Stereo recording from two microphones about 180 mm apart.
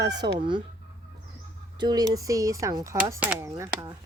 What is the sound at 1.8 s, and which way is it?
Speech, 20° right (ahead or behind).